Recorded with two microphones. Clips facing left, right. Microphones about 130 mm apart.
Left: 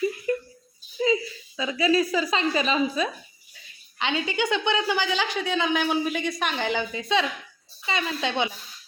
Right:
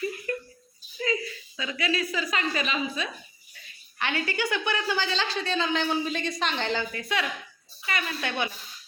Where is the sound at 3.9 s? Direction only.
20° left (ahead or behind).